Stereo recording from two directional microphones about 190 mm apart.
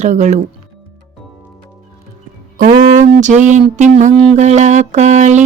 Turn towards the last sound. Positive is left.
turn(degrees=-40)  # may be behind; listen again after turning